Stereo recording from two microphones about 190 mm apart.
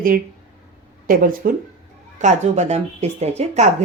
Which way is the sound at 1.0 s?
45° right (ahead or behind).